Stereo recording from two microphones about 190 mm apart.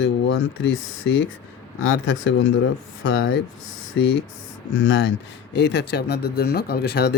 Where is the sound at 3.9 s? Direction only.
65° left (ahead or behind).